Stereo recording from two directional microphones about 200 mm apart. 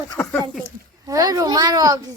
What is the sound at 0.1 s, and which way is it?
Speech, 10° left (ahead or behind).